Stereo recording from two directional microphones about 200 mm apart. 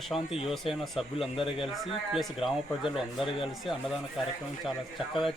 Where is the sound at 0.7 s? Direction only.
Centre (ahead or behind).